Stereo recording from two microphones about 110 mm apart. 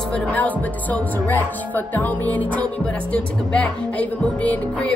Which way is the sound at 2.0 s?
15° left (ahead or behind).